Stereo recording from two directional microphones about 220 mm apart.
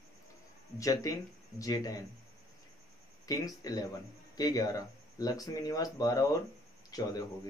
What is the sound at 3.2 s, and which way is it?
Speech, 15° left (ahead or behind).